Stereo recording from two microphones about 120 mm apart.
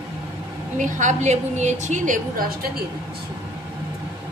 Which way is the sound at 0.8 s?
90° right.